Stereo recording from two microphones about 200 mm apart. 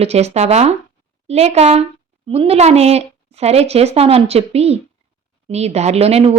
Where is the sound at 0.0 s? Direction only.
30° right (ahead or behind).